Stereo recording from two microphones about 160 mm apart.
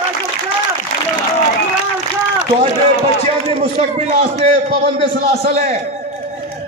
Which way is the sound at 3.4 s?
40° right (ahead or behind).